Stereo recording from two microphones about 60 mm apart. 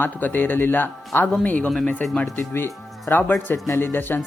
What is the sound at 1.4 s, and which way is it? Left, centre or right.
Speech, left.